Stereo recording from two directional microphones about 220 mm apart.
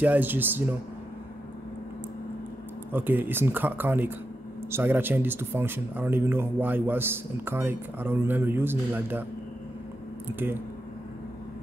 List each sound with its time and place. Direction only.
0.0 s speech: 10° right (ahead or behind)
2.9 s speech: 10° right (ahead or behind)
10.2 s speech: 10° right (ahead or behind)